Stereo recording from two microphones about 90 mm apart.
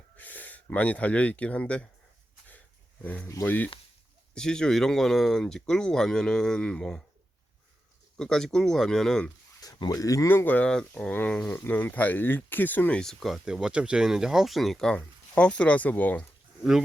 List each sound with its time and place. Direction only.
0.2 s speech: 20° left (ahead or behind)
3.0 s speech: 15° left (ahead or behind)
4.4 s speech: 10° left (ahead or behind)
8.2 s speech: 5° left (ahead or behind)
9.6 s speech: 50° left (ahead or behind)
10.2 s speech: 20° left (ahead or behind)
13.0 s speech: 5° left (ahead or behind)